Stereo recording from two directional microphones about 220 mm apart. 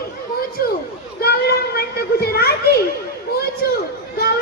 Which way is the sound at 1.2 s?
45° left (ahead or behind).